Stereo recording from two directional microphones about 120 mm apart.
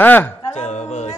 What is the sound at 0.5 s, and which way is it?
A capella, 75° left (ahead or behind).